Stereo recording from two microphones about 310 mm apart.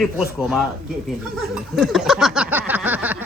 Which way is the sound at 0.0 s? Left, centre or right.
Centre.